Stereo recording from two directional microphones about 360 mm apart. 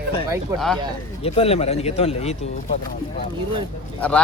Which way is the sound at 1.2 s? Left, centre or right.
Centre.